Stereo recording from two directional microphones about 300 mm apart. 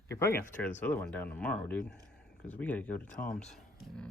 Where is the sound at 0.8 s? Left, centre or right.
Centre.